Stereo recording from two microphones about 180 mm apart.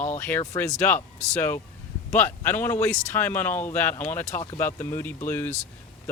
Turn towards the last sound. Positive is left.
turn(degrees=10)  # may be behind; listen again after turning